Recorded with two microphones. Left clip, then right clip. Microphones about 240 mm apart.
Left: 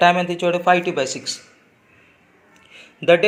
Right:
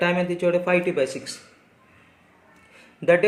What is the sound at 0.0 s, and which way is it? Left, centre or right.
Speech, centre.